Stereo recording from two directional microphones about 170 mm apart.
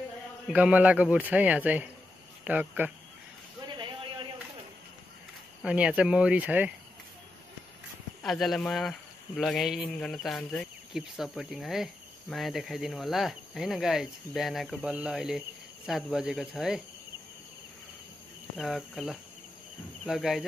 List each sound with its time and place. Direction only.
0.5 s a man's voice: 10° right (ahead or behind)
3.6 s a sound: 25° right (ahead or behind)
5.6 s a man's voice: 5° right (ahead or behind)
8.2 s speech: centre (ahead or behind)
18.6 s speech: centre (ahead or behind)